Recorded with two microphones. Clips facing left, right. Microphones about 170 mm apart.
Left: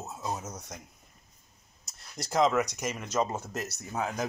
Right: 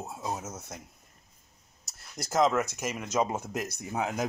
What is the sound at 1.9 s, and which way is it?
Speech, centre (ahead or behind).